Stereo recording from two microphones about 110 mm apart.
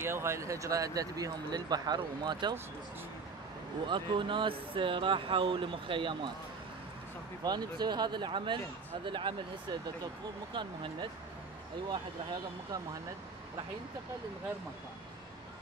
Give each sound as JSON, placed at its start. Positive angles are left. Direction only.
{"t": 0.0, "sound": "speech", "side_deg": -25}
{"t": 3.8, "sound": "speech", "side_deg": -45}
{"t": 7.4, "sound": "speech", "side_deg": -40}